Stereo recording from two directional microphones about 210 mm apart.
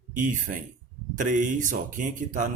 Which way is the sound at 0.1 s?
40° right (ahead or behind).